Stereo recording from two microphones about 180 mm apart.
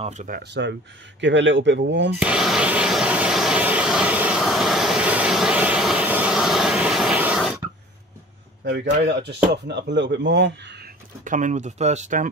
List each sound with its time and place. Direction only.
0.0 s speech: 40° right (ahead or behind)
0.4 s speech: 70° right (ahead or behind)
1.2 s speech: 90° right
2.1 s vehicle: 5° right (ahead or behind)
8.6 s speech: 70° right (ahead or behind)
11.2 s speech: 45° right (ahead or behind)